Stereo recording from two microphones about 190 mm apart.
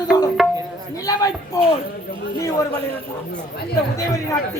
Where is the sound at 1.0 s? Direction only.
20° left (ahead or behind).